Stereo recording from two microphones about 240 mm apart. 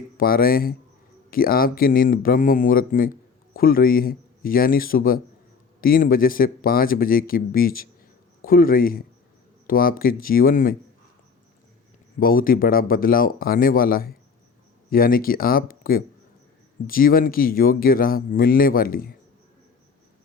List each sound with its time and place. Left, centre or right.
0.2 s a man's voice: left
12.2 s speech: left